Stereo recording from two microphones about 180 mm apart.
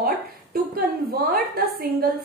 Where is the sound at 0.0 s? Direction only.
55° right (ahead or behind).